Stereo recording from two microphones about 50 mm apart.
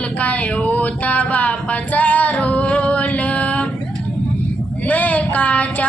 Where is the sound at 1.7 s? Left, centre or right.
Left.